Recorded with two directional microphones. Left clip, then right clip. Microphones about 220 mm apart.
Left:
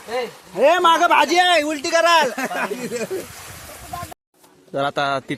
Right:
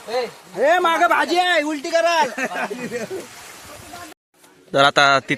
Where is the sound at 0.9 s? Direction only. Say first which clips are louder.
Left 2 dB; centre (ahead or behind).